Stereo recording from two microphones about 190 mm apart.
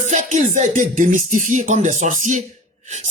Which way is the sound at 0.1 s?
40° right (ahead or behind).